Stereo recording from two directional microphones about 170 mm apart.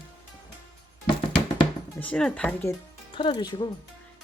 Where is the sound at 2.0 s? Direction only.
5° left (ahead or behind).